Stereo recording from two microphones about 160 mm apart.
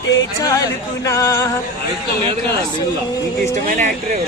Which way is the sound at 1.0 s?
20° left (ahead or behind).